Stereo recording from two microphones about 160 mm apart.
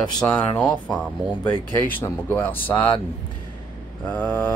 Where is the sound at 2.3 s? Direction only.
10° left (ahead or behind).